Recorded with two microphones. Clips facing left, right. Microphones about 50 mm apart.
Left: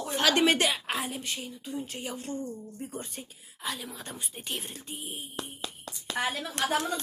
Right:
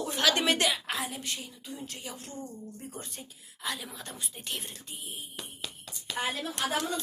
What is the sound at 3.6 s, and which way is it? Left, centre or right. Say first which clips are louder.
Speech: even; centre.